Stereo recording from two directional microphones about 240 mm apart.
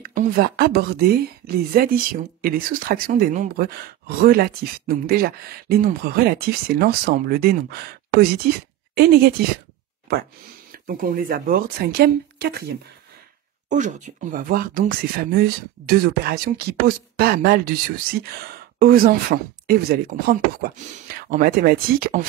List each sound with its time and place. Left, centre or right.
0.0 s speech: right
13.7 s speech: right